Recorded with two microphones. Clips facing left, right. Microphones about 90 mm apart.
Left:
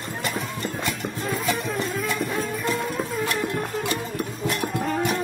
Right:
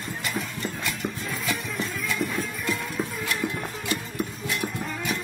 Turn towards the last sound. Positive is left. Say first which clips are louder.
# left 6 dB
turn(degrees=45)  # may be behind; listen again after turning